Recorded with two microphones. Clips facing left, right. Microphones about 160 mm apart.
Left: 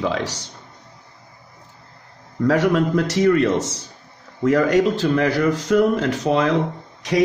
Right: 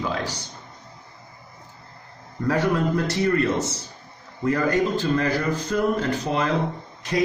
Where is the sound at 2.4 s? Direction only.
90° left.